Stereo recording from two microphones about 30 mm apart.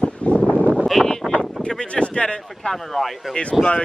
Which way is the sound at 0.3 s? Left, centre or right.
Left.